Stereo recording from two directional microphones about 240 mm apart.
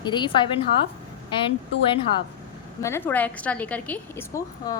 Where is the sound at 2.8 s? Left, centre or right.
Centre.